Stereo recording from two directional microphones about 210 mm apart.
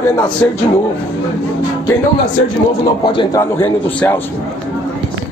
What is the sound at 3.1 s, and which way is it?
Speech, 15° left (ahead or behind).